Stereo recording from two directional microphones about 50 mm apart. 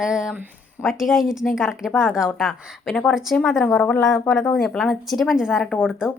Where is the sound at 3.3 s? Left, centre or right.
Left.